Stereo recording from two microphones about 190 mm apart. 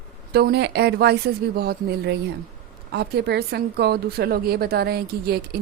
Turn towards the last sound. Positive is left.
turn(degrees=-55)  # may be behind; listen again after turning